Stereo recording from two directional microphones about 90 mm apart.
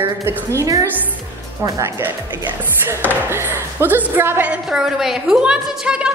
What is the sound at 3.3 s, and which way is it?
A woman's voice, 25° right (ahead or behind).